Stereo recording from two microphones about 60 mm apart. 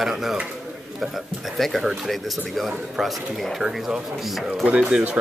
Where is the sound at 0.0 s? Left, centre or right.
Centre.